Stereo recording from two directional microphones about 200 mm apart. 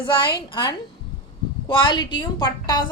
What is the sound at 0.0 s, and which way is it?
A woman's voice, 25° left (ahead or behind).